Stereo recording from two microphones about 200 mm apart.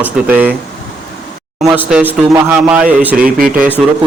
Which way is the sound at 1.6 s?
10° right (ahead or behind).